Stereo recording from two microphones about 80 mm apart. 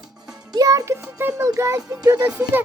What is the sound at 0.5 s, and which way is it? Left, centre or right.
Speech, right.